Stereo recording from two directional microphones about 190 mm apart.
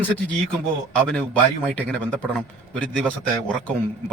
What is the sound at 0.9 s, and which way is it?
A man's voice, 5° left (ahead or behind).